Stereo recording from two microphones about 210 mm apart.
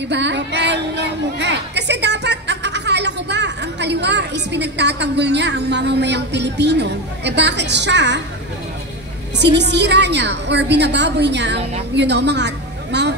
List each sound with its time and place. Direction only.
0.1 s speech: 55° right (ahead or behind)
9.4 s a woman's voice: 55° right (ahead or behind)